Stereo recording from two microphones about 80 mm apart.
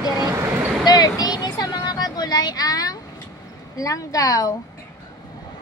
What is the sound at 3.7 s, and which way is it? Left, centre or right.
Speech, left.